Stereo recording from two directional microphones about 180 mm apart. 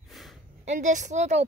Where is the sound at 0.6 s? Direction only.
45° right (ahead or behind).